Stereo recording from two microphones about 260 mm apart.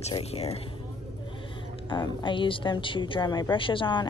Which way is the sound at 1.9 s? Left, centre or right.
Centre.